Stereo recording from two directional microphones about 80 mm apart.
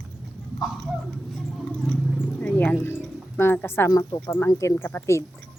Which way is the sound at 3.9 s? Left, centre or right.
Left.